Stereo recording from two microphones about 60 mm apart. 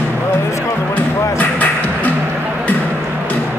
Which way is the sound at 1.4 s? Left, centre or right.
Left.